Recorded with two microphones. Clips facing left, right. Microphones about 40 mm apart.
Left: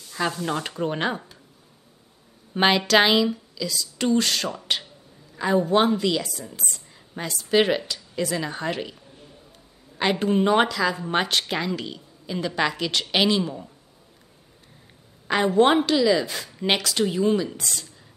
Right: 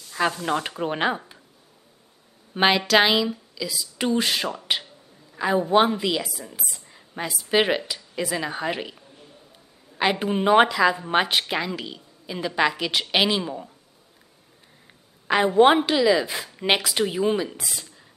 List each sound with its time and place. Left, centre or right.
0.1 s a woman's voice: centre
2.5 s a woman's voice: centre
15.2 s a woman's voice: centre